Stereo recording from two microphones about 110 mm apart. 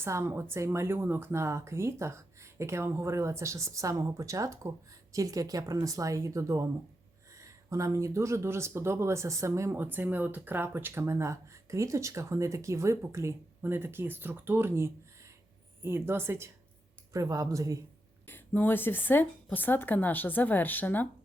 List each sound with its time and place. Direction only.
0.0 s speech: 25° right (ahead or behind)
18.3 s a woman's voice: 20° left (ahead or behind)